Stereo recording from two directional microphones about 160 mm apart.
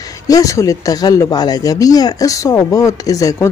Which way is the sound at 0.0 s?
20° left (ahead or behind).